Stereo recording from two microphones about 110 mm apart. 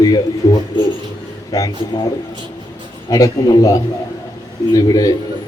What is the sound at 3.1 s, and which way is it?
A man's voice, 35° left (ahead or behind).